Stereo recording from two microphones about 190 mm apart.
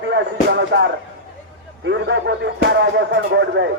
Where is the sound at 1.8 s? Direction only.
70° right (ahead or behind).